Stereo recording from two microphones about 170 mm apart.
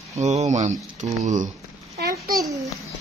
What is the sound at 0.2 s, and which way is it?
Speech, 40° right (ahead or behind).